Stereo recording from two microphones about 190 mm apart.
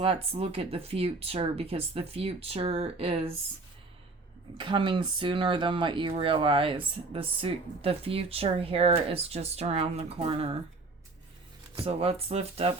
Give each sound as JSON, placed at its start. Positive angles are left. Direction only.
{"t": 0.0, "sound": "speech", "side_deg": -30}
{"t": 4.5, "sound": "speech", "side_deg": -25}
{"t": 11.9, "sound": "speech", "side_deg": -30}